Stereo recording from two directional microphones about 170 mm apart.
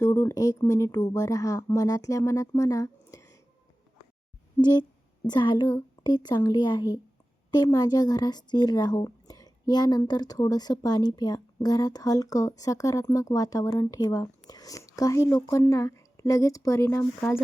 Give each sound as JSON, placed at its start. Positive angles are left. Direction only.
{"t": 0.0, "sound": "a woman's voice", "side_deg": 15}
{"t": 4.5, "sound": "a woman's voice", "side_deg": 25}